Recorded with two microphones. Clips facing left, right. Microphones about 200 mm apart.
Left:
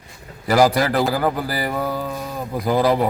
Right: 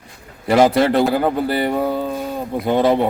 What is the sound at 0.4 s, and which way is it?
Speech, 25° right (ahead or behind).